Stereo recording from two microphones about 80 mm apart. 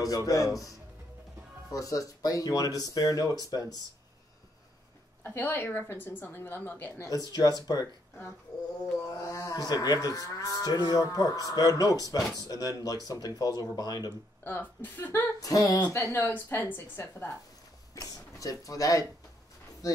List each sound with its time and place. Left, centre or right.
0.0 s cattle: left
5.2 s speech: left
7.0 s cattle: left
8.9 s cattle: left
14.4 s speech: left
15.4 s cattle: left
16.2 s speech: left
17.9 s speech: left